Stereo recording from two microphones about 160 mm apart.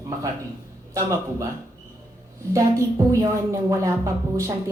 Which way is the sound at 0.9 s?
15° right (ahead or behind).